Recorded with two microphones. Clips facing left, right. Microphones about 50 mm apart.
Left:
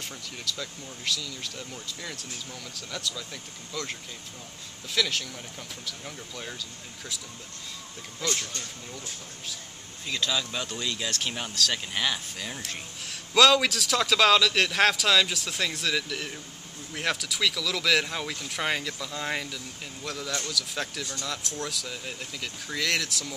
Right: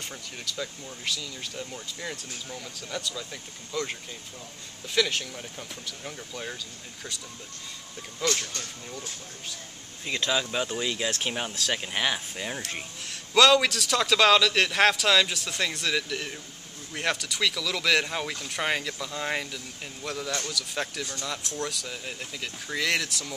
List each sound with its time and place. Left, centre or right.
0.0 s speech: centre
8.2 s speech: centre
10.0 s speech: right
13.0 s speech: centre